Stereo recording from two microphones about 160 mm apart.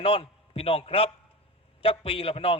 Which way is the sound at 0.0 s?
35° left (ahead or behind).